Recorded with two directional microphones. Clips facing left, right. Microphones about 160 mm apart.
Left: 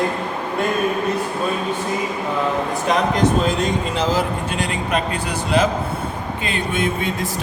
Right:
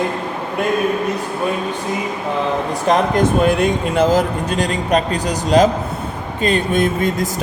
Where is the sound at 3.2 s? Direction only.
55° right (ahead or behind).